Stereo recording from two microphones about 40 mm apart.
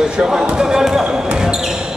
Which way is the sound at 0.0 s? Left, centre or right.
Centre.